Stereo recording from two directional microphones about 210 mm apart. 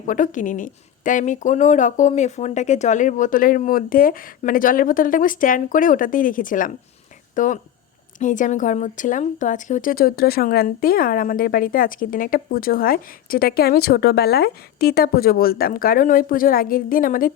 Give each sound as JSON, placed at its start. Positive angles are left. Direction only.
{"t": 0.1, "sound": "a woman's voice", "side_deg": 40}